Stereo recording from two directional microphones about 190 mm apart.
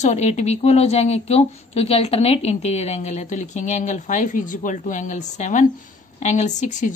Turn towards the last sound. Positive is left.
turn(degrees=40)  # may be behind; listen again after turning